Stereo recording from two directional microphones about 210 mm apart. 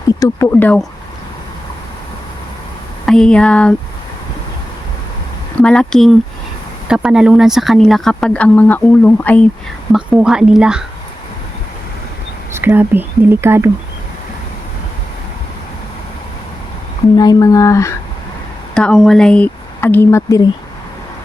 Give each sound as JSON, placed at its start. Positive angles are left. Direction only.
{"t": 0.1, "sound": "speech", "side_deg": 15}
{"t": 3.1, "sound": "speech", "side_deg": 5}
{"t": 5.5, "sound": "speech", "side_deg": 5}
{"t": 9.9, "sound": "speech", "side_deg": -5}
{"t": 12.5, "sound": "speech", "side_deg": -10}
{"t": 17.2, "sound": "speech", "side_deg": 15}
{"t": 18.7, "sound": "speech", "side_deg": 5}